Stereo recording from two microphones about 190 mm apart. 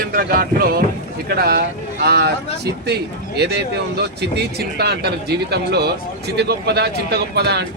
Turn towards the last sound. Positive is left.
turn(degrees=-60)  # may be behind; listen again after turning